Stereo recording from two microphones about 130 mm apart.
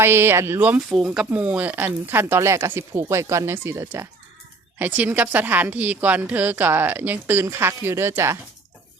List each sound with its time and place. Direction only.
0.0 s a woman's voice: 20° right (ahead or behind)
0.9 s a woman's voice: 5° right (ahead or behind); by 8.4 s 20° right (ahead or behind)